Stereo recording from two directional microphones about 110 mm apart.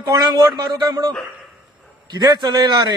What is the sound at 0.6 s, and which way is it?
A man's voice, 40° right (ahead or behind).